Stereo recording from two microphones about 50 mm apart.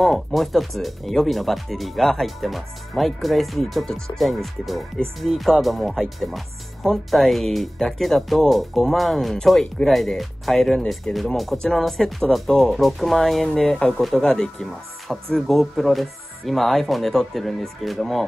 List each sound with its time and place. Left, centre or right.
0.0 s speech: centre
11.1 s speech: centre
11.8 s speech: centre
15.1 s speech: centre